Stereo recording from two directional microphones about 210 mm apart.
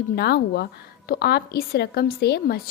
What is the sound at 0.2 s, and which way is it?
A woman's voice, 50° left (ahead or behind).